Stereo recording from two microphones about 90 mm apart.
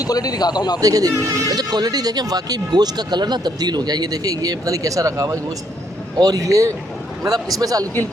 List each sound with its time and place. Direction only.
0.0 s a man's voice: 45° left (ahead or behind)
0.8 s speech: 40° right (ahead or behind)